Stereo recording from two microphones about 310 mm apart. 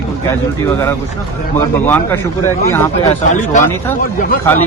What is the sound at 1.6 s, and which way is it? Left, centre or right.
Speech, centre.